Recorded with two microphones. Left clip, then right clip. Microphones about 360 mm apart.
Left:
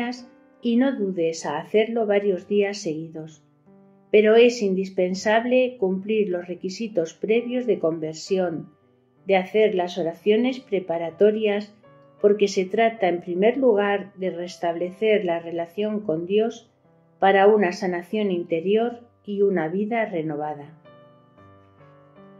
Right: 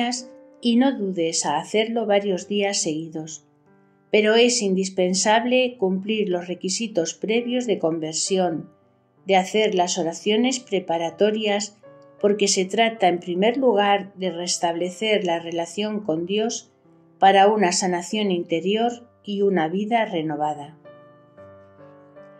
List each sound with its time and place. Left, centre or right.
0.0 s speech: centre